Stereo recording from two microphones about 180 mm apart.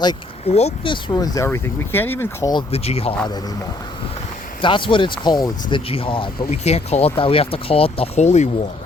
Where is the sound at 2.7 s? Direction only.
35° left (ahead or behind).